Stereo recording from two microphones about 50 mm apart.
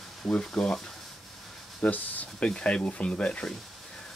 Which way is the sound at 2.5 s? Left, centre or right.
Left.